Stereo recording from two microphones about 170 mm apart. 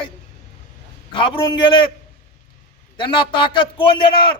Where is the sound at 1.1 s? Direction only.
30° left (ahead or behind).